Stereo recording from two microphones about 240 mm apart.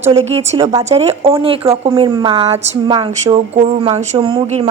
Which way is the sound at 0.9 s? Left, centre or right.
Right.